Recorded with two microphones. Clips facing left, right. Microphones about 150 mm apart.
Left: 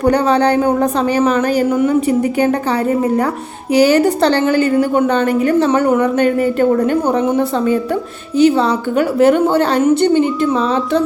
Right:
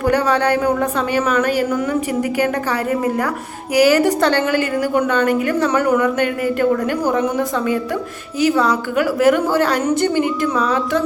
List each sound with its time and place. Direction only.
0.0 s a woman's voice: 30° left (ahead or behind)